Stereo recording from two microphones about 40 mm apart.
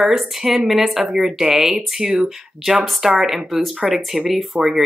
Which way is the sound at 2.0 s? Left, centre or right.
Centre.